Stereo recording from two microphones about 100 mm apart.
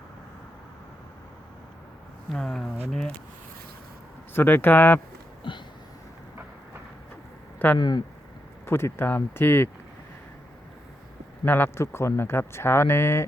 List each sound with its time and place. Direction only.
2.3 s speech: 5° left (ahead or behind)
4.4 s speech: 20° left (ahead or behind)
5.4 s a sound: 50° left (ahead or behind)
7.8 s speech: 45° left (ahead or behind)
8.6 s speech: 25° left (ahead or behind)
11.4 s speech: 20° left (ahead or behind)